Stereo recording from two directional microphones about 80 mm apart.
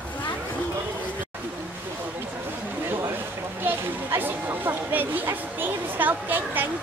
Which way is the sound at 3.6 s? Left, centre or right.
Right.